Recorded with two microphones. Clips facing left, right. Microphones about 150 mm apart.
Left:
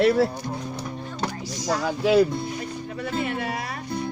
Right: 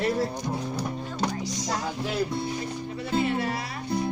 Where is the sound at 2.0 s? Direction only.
90° left.